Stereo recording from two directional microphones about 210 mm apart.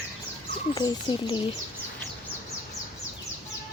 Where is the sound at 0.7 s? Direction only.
20° left (ahead or behind).